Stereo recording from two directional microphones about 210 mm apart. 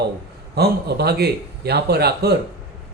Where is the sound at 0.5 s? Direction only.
50° right (ahead or behind).